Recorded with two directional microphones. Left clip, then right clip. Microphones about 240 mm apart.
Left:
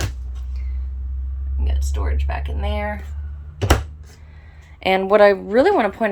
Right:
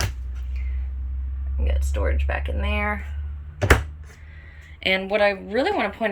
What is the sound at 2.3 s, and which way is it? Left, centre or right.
Speech, right.